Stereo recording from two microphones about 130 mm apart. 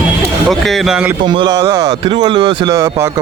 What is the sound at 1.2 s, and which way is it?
Speech, 35° right (ahead or behind).